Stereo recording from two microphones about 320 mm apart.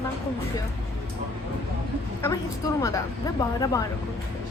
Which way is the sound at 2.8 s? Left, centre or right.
Centre.